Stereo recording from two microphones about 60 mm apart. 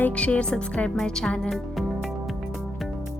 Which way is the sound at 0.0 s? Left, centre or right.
Left.